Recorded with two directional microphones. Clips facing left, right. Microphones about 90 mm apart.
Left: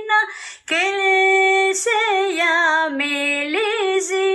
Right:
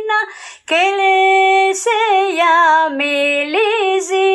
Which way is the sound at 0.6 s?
60° right (ahead or behind).